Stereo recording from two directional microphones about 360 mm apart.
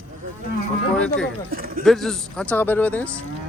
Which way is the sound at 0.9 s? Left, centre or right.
Centre.